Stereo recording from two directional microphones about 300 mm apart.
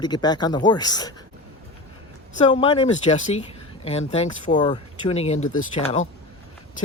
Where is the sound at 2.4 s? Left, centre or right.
Centre.